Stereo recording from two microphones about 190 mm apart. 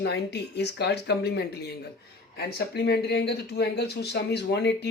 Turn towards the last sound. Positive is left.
turn(degrees=65)  # may be behind; listen again after turning